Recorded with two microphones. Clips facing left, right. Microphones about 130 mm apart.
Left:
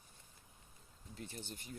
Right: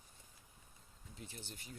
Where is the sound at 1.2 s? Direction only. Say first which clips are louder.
Left 4 dB; 50° left (ahead or behind).